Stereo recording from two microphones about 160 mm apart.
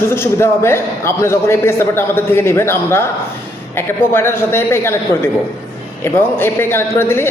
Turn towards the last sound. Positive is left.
turn(degrees=15)  # may be behind; listen again after turning